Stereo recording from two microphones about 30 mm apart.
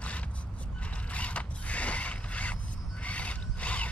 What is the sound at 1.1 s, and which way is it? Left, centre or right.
Mechanisms, left.